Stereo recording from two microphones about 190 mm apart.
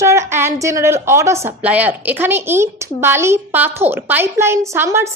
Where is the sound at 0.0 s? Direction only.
15° right (ahead or behind).